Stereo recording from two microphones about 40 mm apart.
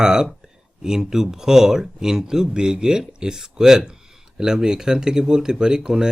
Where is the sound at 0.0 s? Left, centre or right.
Centre.